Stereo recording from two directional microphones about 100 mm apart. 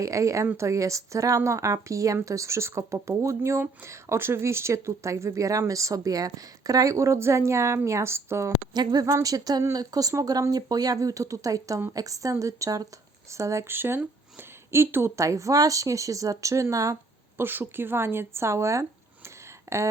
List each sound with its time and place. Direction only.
0.0 s speech: 30° right (ahead or behind)
8.7 s speech: 45° right (ahead or behind)
19.7 s a sound: 30° right (ahead or behind)